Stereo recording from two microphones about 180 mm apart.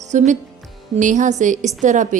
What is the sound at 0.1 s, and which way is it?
A woman's voice, 40° right (ahead or behind).